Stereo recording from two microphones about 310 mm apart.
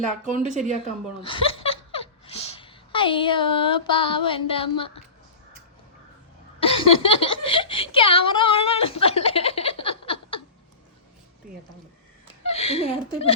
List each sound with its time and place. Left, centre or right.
0.3 s speech: right
1.2 s speech: centre
6.6 s a sound: centre
12.4 s speech: centre